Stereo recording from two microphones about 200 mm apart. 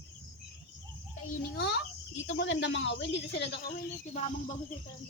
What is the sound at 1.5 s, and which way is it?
A child's voice, 55° left (ahead or behind).